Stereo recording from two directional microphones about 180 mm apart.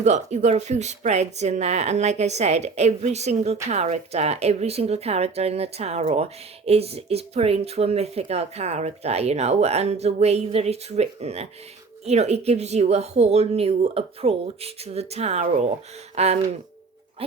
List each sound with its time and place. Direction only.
0.0 s speech: 40° right (ahead or behind)